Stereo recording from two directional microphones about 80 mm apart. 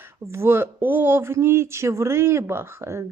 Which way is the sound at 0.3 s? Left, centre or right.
Right.